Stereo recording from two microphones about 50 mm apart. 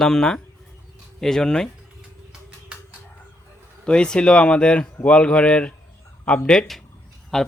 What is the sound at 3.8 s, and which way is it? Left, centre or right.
Speech, centre.